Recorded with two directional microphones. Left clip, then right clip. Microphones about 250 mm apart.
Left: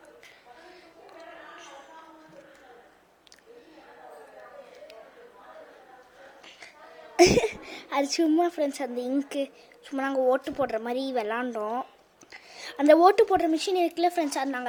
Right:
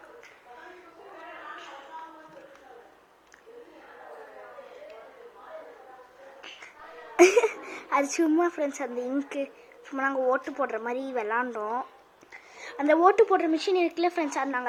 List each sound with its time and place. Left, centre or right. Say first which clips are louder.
7.2 s a woman's voice: right 1 dB; left
12.3 s a sound: left 1 dB; left
13.1 s speech: even; left